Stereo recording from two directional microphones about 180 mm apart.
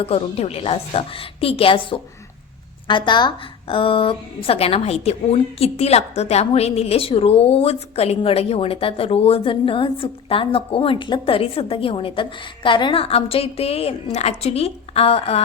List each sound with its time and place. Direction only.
0.0 s a woman's voice: 35° left (ahead or behind)